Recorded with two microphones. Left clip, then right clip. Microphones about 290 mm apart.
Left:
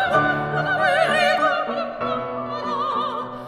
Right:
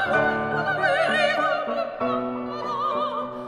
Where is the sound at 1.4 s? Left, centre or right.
Right.